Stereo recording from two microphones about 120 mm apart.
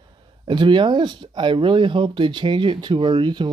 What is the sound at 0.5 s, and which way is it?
Speech, 40° right (ahead or behind).